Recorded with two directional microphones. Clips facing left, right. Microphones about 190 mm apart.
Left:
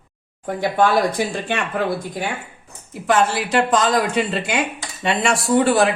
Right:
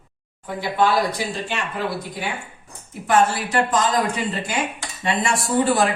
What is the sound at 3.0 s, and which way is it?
Speech, 75° left (ahead or behind).